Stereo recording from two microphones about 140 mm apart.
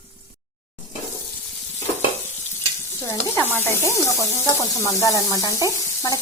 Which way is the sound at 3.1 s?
15° left (ahead or behind).